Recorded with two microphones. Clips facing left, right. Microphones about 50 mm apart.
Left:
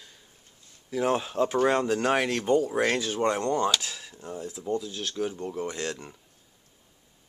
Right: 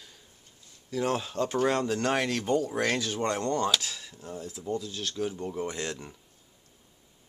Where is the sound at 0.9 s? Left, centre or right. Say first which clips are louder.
Left 3 dB; centre.